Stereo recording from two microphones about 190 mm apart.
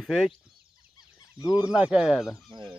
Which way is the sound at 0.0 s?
5° left (ahead or behind).